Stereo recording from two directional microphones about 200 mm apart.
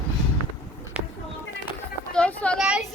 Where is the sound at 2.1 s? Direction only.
5° left (ahead or behind).